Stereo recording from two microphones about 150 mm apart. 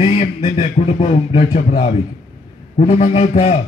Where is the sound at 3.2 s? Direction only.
40° left (ahead or behind).